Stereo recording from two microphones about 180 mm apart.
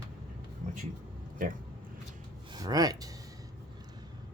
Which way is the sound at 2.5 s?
20° right (ahead or behind).